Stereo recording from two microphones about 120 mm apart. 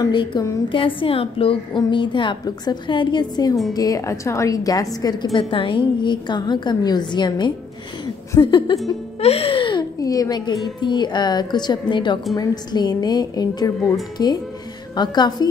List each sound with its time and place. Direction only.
0.1 s a woman's voice: 40° left (ahead or behind)
5.3 s a woman's voice: 45° left (ahead or behind)
9.2 s a woman's voice: 55° left (ahead or behind)
9.9 s a woman's voice: 30° left (ahead or behind)